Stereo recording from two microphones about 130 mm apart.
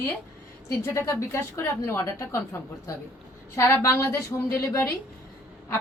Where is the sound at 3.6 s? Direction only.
20° left (ahead or behind).